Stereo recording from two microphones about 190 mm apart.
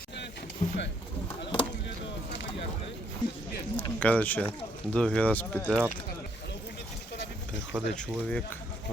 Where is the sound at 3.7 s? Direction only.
10° left (ahead or behind).